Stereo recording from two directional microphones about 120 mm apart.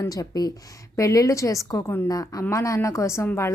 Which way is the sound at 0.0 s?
30° left (ahead or behind).